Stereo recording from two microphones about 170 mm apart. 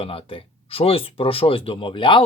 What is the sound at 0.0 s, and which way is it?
Speech, 35° left (ahead or behind).